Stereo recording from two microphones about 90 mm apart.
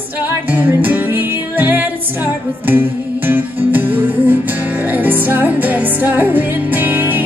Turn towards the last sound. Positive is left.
turn(degrees=-20)  # may be behind; listen again after turning